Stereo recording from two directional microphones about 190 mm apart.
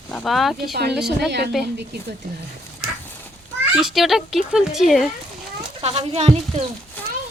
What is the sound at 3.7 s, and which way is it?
A woman's voice, centre (ahead or behind).